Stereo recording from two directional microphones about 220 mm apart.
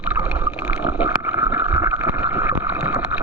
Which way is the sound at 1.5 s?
15° right (ahead or behind).